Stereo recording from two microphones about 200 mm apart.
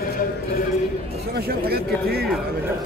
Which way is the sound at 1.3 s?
50° right (ahead or behind).